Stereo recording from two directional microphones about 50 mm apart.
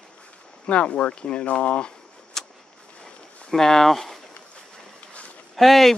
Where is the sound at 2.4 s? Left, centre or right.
Centre.